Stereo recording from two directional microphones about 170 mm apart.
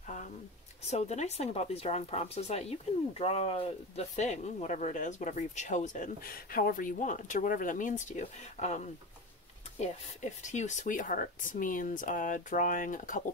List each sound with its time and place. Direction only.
0.8 s speech: 40° left (ahead or behind)